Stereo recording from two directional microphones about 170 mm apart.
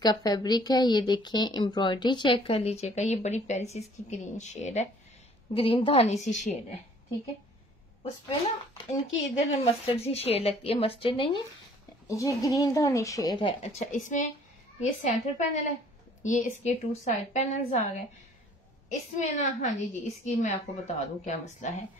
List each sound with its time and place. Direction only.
0.0 s a woman's voice: 25° left (ahead or behind); by 4.8 s 45° left (ahead or behind)
5.5 s a woman's voice: 30° left (ahead or behind)
8.0 s a woman's voice: 30° left (ahead or behind)
12.1 s a woman's voice: 20° left (ahead or behind); by 17.8 s 40° left (ahead or behind)
18.9 s a woman's voice: 45° left (ahead or behind)